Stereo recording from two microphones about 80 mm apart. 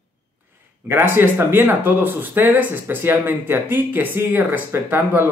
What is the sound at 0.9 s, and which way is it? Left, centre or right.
Speech, right.